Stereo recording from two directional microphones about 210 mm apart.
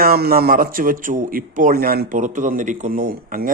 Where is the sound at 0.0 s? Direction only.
45° right (ahead or behind).